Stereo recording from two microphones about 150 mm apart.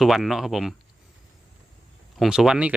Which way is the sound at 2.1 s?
Centre (ahead or behind).